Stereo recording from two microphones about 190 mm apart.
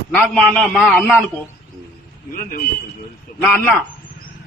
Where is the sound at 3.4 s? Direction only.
10° left (ahead or behind).